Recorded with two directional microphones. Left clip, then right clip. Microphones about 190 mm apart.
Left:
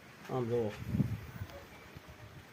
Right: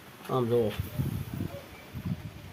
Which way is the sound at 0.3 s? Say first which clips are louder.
Right 7 dB; 10° right (ahead or behind).